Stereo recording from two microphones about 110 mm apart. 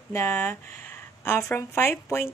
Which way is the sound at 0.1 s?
20° left (ahead or behind).